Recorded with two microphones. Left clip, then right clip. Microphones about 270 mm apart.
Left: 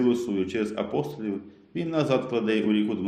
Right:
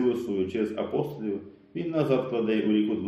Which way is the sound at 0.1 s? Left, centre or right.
Left.